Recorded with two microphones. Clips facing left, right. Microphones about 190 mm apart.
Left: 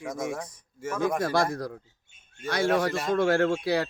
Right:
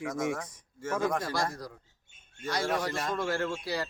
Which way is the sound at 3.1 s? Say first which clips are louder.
Left 8 dB; 65° left (ahead or behind).